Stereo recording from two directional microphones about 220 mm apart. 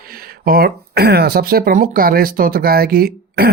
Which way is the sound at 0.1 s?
40° right (ahead or behind).